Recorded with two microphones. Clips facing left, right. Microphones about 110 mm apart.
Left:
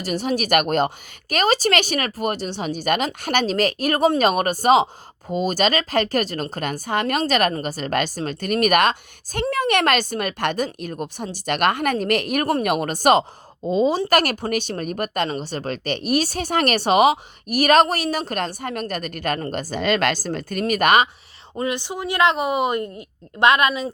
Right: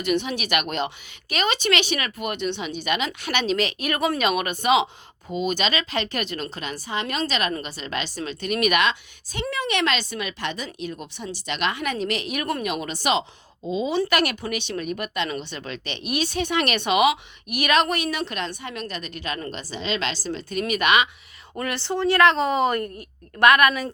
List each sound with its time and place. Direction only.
0.0 s speech: 40° left (ahead or behind)
21.6 s a woman's voice: 15° left (ahead or behind)